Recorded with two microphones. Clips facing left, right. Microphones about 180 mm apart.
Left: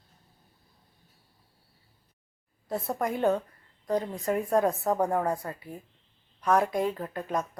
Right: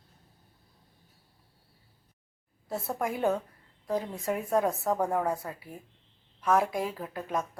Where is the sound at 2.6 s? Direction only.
5° right (ahead or behind).